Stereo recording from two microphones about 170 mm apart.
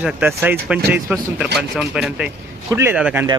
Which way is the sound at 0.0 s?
10° right (ahead or behind).